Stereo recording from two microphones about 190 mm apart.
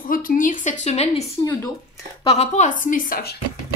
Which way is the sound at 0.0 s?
45° left (ahead or behind).